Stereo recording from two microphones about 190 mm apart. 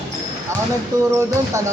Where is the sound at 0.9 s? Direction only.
20° right (ahead or behind).